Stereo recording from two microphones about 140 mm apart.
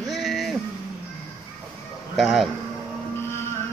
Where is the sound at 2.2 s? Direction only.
Centre (ahead or behind).